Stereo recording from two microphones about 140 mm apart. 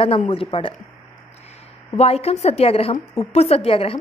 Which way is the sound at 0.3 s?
40° left (ahead or behind).